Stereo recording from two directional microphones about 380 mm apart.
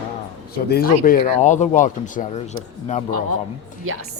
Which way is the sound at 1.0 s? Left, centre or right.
Centre.